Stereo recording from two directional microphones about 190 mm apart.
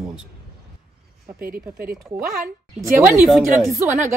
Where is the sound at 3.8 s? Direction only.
15° right (ahead or behind).